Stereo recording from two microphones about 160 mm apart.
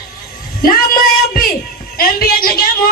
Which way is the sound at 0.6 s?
65° left (ahead or behind).